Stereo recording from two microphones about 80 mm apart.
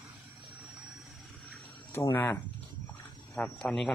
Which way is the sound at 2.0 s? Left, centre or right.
Left.